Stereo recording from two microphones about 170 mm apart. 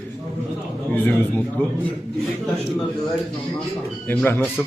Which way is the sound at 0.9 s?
10° left (ahead or behind).